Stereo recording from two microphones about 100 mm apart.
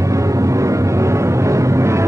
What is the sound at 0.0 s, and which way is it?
Music, 30° right (ahead or behind).